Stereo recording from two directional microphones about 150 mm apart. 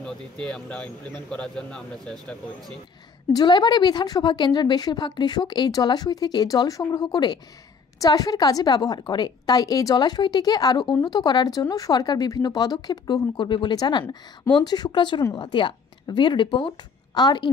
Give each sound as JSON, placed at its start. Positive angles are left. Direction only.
{"t": 0.0, "sound": "speech", "side_deg": 5}
{"t": 3.3, "sound": "a woman's voice", "side_deg": 30}